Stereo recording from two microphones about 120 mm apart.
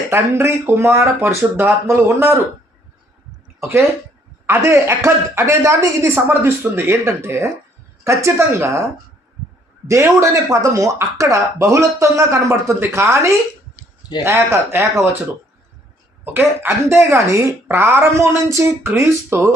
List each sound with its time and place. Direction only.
0.1 s speech: 20° right (ahead or behind)
3.6 s speech: 20° right (ahead or behind)
9.8 s speech: 25° right (ahead or behind)
16.2 s speech: 15° right (ahead or behind)